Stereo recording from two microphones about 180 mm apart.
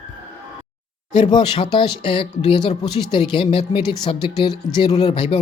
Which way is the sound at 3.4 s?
30° left (ahead or behind).